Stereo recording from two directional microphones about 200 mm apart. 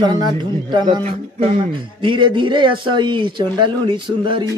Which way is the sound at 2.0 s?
25° right (ahead or behind).